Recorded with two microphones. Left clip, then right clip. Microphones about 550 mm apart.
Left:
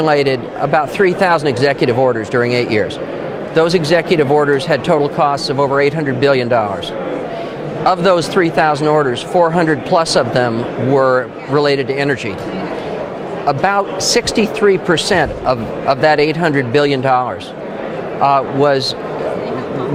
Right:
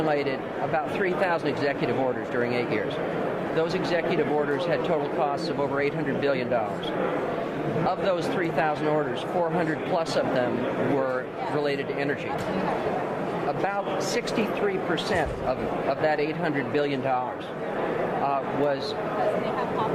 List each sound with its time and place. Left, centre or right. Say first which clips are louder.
0.1 s speech: left 12 dB; left
7.9 s speech: left 15 dB; left
13.5 s speech: left 15 dB; left
18.3 s speech: left 17 dB; left